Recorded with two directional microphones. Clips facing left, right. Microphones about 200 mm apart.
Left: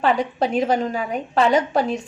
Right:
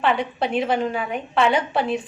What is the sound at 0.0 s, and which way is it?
A woman's voice, 40° left (ahead or behind).